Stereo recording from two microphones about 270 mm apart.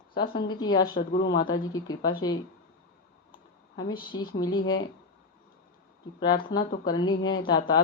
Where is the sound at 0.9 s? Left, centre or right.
Left.